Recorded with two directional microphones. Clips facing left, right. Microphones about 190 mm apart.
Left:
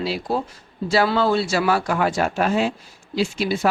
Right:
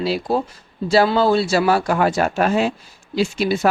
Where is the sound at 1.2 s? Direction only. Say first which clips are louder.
Right 3 dB; 35° right (ahead or behind).